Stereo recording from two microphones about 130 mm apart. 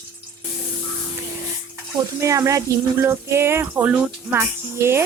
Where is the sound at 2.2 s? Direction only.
25° right (ahead or behind).